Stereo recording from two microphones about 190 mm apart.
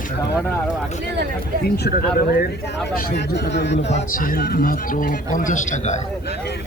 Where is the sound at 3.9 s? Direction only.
40° left (ahead or behind).